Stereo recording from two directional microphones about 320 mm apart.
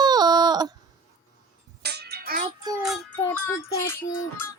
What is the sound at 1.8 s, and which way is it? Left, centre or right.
Music, right.